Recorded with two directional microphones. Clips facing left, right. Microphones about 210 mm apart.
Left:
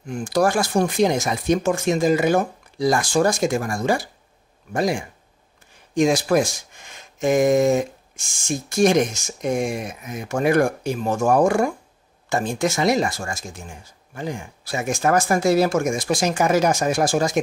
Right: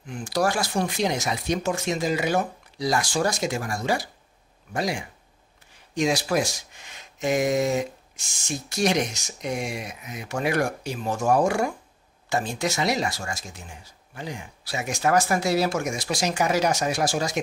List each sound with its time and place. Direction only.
0.0 s speech: 50° left (ahead or behind)